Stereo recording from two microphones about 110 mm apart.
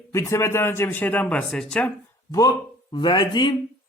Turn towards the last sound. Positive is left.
turn(degrees=45)  # may be behind; listen again after turning